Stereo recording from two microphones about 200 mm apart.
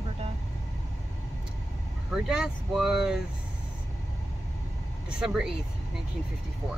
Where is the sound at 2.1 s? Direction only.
5° right (ahead or behind).